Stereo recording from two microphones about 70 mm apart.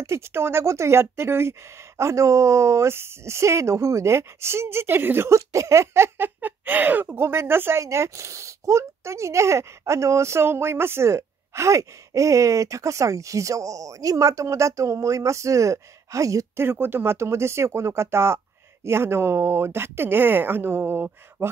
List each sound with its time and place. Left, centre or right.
0.0 s speech: right
7.8 s speech: right
16.5 s speech: right